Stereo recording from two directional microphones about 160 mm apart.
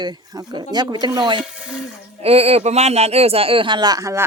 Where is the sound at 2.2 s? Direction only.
40° right (ahead or behind); by 4.2 s 20° right (ahead or behind).